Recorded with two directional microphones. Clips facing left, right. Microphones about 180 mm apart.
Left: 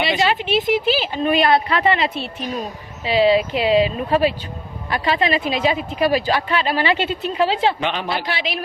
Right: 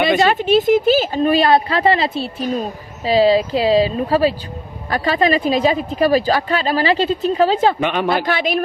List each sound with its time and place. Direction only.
0.0 s speech: 50° right (ahead or behind)